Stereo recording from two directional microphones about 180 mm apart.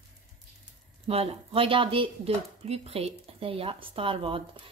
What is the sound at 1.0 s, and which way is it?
Speech, 35° right (ahead or behind).